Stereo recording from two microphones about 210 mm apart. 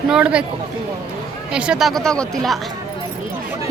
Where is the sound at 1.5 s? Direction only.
5° right (ahead or behind).